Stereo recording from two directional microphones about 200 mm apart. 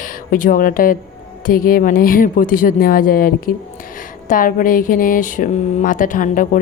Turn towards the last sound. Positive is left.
turn(degrees=40)  # may be behind; listen again after turning